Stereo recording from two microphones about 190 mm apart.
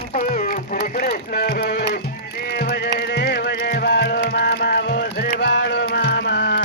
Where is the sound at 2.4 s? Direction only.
55° left (ahead or behind).